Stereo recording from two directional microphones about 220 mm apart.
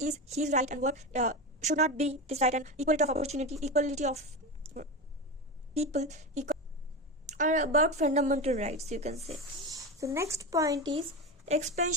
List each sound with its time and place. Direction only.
0.0 s a woman's voice: 30° right (ahead or behind)
9.6 s speech: 15° right (ahead or behind)
11.4 s a woman's voice: 30° right (ahead or behind)